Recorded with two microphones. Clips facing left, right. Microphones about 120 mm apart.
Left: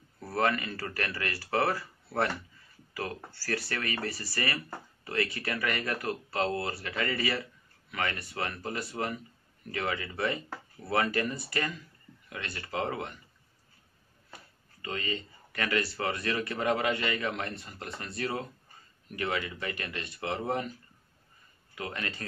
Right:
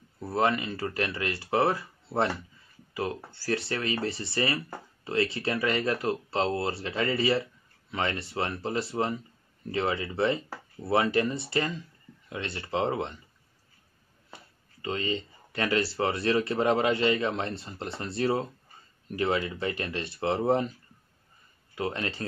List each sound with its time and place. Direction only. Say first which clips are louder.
0.2 s speech: right 3 dB; 20° right (ahead or behind)
2.9 s a sound: right 5 dB; 20° right (ahead or behind)
3.3 s speech: right 4 dB; 25° right (ahead or behind)
14.8 s speech: right 5 dB; 25° right (ahead or behind)
21.7 s speech: right 6 dB; 30° right (ahead or behind)